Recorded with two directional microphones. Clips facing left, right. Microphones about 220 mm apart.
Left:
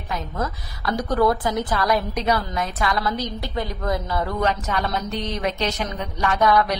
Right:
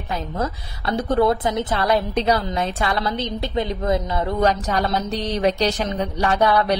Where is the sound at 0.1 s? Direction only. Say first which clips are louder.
Right 2 dB; 25° right (ahead or behind).